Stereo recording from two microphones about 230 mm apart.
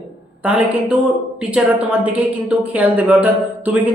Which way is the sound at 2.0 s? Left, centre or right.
Centre.